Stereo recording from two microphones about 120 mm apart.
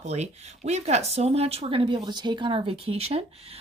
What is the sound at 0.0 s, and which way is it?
A woman's voice, 70° right (ahead or behind).